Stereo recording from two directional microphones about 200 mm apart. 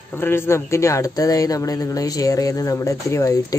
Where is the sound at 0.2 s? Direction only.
10° left (ahead or behind).